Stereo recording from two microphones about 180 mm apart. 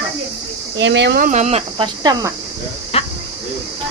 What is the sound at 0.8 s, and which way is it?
Speech, 80° right.